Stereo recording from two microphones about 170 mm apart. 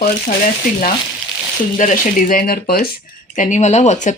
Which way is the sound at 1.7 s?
50° left (ahead or behind).